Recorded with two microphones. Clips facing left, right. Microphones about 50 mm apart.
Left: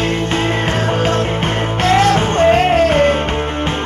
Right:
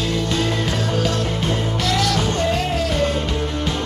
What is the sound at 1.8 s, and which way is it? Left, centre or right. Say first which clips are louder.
Music: left 9 dB; left.